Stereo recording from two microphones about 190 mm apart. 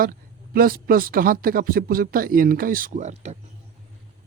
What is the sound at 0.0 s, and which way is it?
Speech, 50° right (ahead or behind).